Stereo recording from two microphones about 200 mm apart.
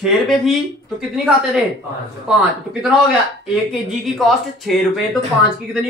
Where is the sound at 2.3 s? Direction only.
5° right (ahead or behind).